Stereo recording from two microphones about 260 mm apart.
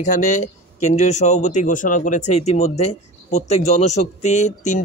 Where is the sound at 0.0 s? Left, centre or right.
Left.